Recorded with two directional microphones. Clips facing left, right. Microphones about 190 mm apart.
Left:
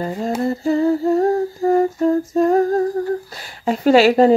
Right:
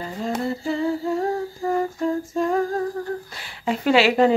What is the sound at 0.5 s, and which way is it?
Humming, 45° left (ahead or behind).